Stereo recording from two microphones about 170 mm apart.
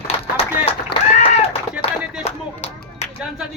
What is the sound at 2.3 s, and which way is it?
Clapping, 40° left (ahead or behind).